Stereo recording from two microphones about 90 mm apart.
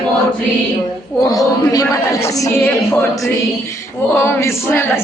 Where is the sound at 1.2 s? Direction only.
40° left (ahead or behind).